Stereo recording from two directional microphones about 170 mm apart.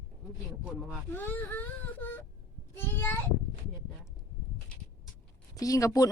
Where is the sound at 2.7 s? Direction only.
15° left (ahead or behind).